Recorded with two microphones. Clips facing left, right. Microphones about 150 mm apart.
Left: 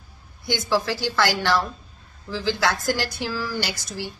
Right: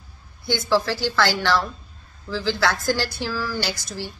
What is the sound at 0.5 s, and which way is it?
A woman's voice, 15° left (ahead or behind).